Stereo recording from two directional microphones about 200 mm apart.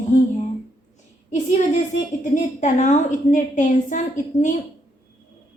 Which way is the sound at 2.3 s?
40° left (ahead or behind).